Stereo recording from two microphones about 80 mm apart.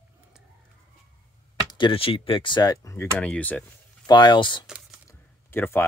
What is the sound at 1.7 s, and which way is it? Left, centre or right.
Speech, left.